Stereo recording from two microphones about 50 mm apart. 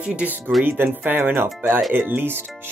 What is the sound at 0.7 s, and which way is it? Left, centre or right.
Speech, right.